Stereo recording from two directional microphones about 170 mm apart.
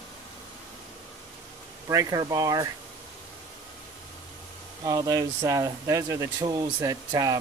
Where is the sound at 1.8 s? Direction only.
20° right (ahead or behind).